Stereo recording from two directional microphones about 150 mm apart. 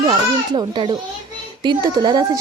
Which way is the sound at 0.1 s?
30° right (ahead or behind).